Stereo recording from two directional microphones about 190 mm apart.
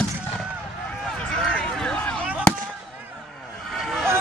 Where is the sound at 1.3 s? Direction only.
5° left (ahead or behind).